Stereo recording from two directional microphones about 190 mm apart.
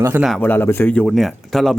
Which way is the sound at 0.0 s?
10° right (ahead or behind).